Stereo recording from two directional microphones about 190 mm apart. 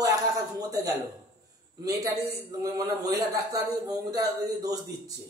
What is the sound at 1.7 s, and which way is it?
A man's voice, 20° right (ahead or behind).